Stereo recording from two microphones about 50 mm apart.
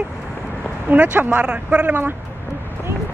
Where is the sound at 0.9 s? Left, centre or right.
Right.